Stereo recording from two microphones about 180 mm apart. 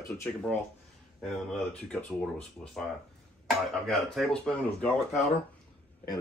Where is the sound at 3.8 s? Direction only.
5° left (ahead or behind).